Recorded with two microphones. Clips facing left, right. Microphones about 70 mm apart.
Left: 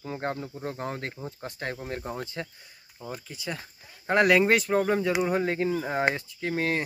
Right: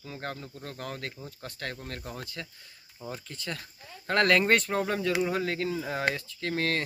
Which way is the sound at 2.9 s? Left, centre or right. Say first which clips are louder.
Left 1 dB; centre.